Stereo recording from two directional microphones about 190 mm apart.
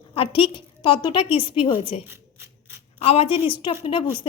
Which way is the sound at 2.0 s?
10° right (ahead or behind).